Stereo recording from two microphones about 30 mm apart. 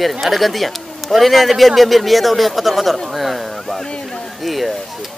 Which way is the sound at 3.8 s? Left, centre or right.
Left.